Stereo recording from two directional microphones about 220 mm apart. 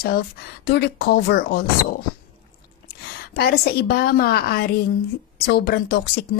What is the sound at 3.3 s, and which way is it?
A woman's voice, 45° left (ahead or behind).